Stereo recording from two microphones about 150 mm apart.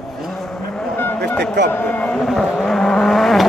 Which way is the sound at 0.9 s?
15° left (ahead or behind).